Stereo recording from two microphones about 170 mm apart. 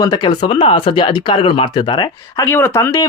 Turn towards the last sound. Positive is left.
turn(degrees=15)  # may be behind; listen again after turning